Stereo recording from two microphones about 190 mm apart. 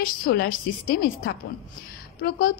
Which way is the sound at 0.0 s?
50° left (ahead or behind).